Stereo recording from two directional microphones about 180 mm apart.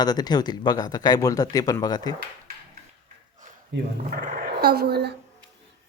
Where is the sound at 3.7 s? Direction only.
80° right.